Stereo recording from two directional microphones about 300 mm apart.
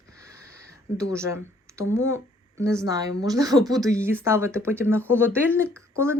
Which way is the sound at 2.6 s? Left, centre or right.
Centre.